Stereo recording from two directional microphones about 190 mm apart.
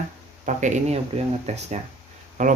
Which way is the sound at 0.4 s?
35° right (ahead or behind).